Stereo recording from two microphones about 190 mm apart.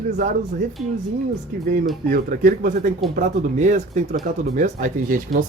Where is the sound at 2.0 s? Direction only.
45° right (ahead or behind).